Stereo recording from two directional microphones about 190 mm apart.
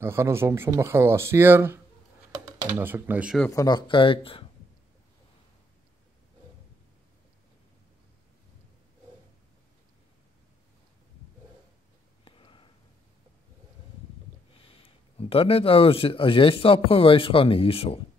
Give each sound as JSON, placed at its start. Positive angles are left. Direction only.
{"t": 0.0, "sound": "speech", "side_deg": -15}
{"t": 3.4, "sound": "speech", "side_deg": 20}
{"t": 12.3, "sound": "a sound", "side_deg": 30}
{"t": 14.6, "sound": "a man's voice", "side_deg": 30}